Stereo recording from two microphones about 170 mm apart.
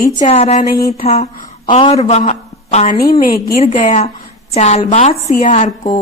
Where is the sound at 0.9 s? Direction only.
50° left (ahead or behind).